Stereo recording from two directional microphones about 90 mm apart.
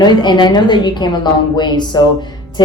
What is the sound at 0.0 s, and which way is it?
Speech, 55° left (ahead or behind).